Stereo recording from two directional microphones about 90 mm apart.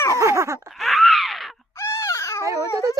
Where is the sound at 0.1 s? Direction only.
35° right (ahead or behind).